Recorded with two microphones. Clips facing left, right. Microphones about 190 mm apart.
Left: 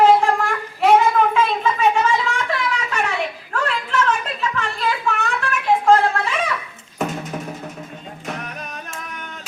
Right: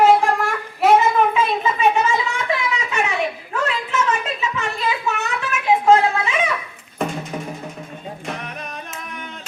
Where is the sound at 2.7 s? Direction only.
5° right (ahead or behind).